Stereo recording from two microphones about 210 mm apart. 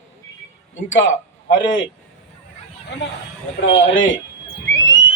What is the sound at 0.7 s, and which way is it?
A man's voice, 65° left (ahead or behind).